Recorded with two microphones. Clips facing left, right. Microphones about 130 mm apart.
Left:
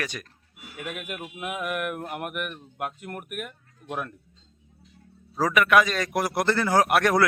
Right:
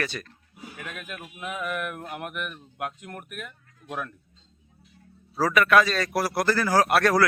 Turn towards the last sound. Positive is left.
turn(degrees=20)  # may be behind; listen again after turning